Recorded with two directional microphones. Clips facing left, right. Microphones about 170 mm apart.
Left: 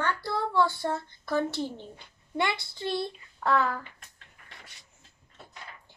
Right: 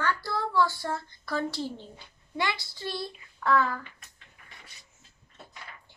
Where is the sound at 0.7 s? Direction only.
25° left (ahead or behind).